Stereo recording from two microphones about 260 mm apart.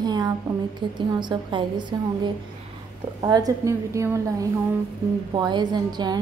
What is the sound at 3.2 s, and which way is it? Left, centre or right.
A woman's voice, centre.